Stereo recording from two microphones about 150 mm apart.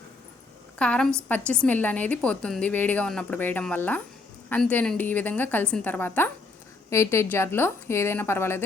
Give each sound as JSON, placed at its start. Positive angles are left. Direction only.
{"t": 0.8, "sound": "a woman's voice", "side_deg": 5}